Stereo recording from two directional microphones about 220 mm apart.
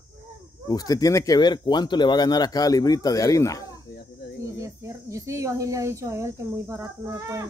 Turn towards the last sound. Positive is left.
turn(degrees=-15)  # may be behind; listen again after turning